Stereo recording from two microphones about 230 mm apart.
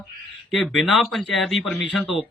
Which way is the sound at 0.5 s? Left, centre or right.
Centre.